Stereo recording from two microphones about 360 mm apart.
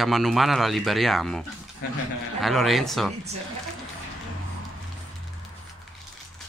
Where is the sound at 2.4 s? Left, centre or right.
Centre.